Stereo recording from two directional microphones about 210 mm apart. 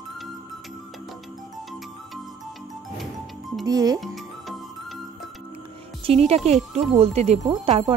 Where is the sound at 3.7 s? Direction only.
20° right (ahead or behind).